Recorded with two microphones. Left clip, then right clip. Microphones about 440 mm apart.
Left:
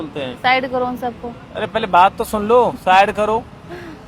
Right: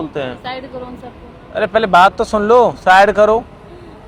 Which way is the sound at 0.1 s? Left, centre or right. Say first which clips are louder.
Right 4 dB; right.